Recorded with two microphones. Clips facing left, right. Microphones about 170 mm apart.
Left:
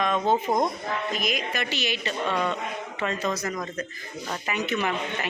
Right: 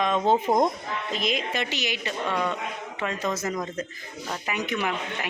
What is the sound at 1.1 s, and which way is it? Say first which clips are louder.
A woman's voice: right 1 dB; 25° right (ahead or behind).